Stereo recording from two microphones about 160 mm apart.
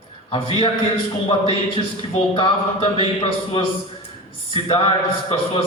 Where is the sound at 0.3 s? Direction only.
35° left (ahead or behind).